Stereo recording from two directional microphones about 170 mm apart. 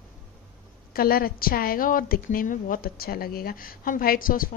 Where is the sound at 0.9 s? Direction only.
60° left (ahead or behind).